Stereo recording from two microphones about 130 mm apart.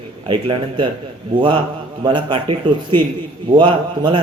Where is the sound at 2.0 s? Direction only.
40° right (ahead or behind).